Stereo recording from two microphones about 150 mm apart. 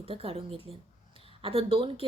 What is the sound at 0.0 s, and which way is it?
Speech, 40° right (ahead or behind).